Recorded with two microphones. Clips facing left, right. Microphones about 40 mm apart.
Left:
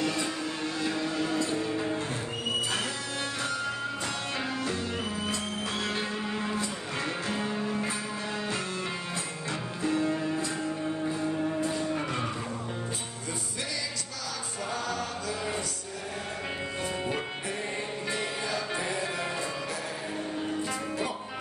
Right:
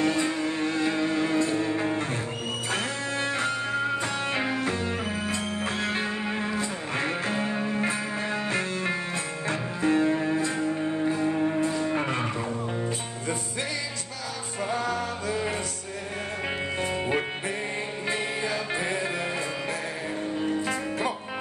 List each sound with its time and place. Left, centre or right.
0.0 s music: right
14.7 s music: right
16.8 s music: right